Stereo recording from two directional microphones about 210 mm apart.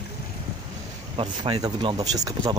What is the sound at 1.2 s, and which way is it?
Speech, 20° right (ahead or behind).